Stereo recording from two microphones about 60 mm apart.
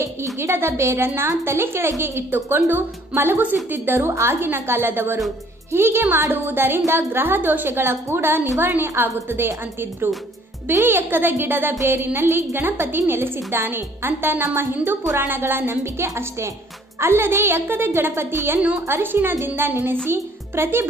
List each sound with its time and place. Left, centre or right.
0.0 s a woman's voice: right
4.1 s a woman's voice: right
11.0 s a woman's voice: right